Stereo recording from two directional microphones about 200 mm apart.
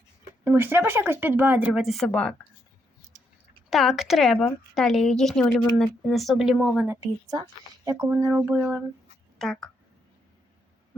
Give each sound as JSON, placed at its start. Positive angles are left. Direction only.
{"t": 0.4, "sound": "speech", "side_deg": -10}
{"t": 3.7, "sound": "a woman's voice", "side_deg": 0}
{"t": 6.7, "sound": "speech", "side_deg": -10}
{"t": 8.1, "sound": "speech", "side_deg": -5}
{"t": 9.4, "sound": "a woman's voice", "side_deg": 5}